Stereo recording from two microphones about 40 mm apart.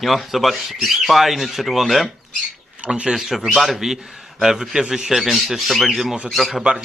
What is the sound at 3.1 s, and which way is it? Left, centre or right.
Speech, centre.